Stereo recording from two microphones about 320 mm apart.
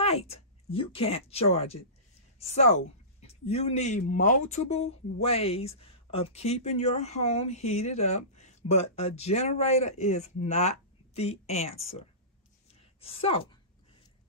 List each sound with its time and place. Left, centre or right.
0.0 s speech: centre
13.0 s a woman's voice: centre